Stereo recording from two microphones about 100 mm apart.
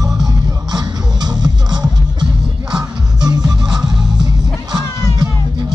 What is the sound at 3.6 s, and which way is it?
Music, 5° right (ahead or behind).